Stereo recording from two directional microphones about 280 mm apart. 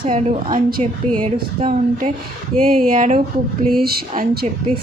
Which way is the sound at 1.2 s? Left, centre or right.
Centre.